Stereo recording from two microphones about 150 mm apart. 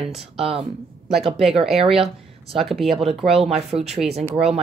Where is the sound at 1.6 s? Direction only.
5° right (ahead or behind).